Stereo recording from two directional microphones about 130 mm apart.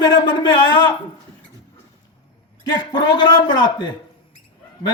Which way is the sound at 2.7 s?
35° left (ahead or behind).